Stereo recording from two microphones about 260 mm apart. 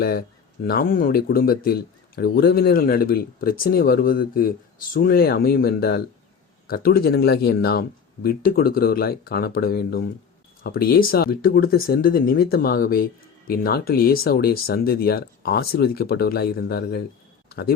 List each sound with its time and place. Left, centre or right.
0.0 s speech: left